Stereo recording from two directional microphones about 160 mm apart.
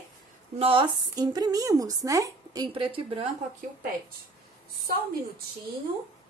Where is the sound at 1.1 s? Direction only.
25° right (ahead or behind).